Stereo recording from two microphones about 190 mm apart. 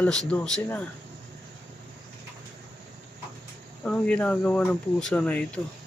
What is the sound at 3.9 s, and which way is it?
Speech, 5° left (ahead or behind).